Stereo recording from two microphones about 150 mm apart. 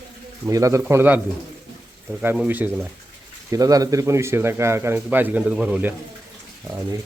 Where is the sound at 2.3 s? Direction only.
10° right (ahead or behind).